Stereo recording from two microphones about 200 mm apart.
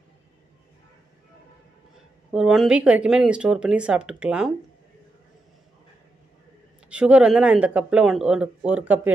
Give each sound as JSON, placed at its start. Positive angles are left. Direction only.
{"t": 2.3, "sound": "speech", "side_deg": 0}
{"t": 6.9, "sound": "speech", "side_deg": -5}